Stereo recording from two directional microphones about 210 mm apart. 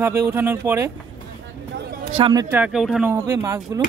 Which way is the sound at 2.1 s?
20° right (ahead or behind).